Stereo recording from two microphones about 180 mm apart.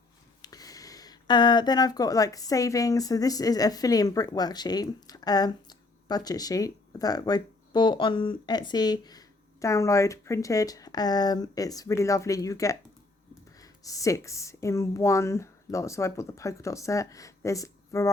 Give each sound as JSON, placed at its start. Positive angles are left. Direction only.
{"t": 0.4, "sound": "speech", "side_deg": 20}